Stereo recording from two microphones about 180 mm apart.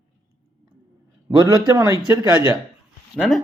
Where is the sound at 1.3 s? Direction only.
20° right (ahead or behind).